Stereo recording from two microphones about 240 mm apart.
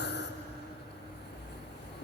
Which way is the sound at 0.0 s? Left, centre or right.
Left.